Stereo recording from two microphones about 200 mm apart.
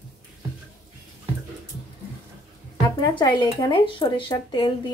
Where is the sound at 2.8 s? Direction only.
20° left (ahead or behind).